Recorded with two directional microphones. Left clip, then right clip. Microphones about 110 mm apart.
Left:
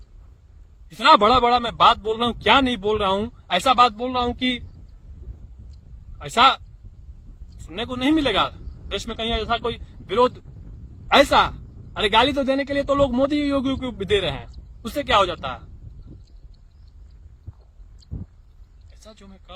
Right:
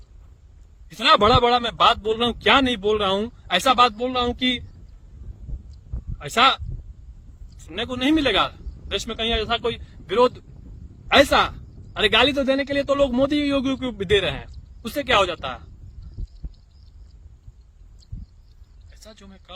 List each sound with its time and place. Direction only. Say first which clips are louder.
0.9 s a man's voice: left 2 dB; 25° right (ahead or behind)
6.1 s speech: left 1 dB; 25° right (ahead or behind)
7.7 s a man's voice: even; 30° right (ahead or behind)
18.9 s a sound: right 1 dB; 25° right (ahead or behind)